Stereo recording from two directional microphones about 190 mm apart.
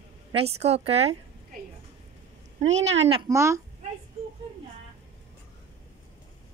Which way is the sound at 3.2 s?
15° right (ahead or behind).